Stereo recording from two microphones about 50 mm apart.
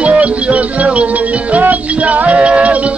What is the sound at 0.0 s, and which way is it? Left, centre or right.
Music, right.